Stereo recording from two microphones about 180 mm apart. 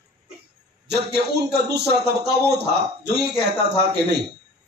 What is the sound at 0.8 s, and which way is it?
A man's voice, 65° right (ahead or behind).